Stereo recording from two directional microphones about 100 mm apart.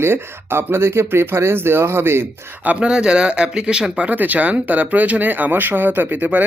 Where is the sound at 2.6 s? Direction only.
10° right (ahead or behind).